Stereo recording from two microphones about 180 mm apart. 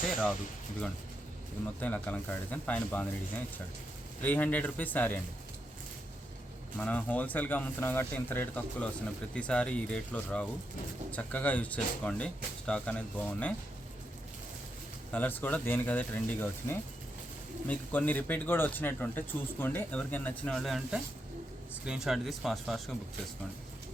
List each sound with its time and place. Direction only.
1.8 s speech: 10° left (ahead or behind)
6.7 s speech: 10° left (ahead or behind)
15.1 s speech: 10° left (ahead or behind)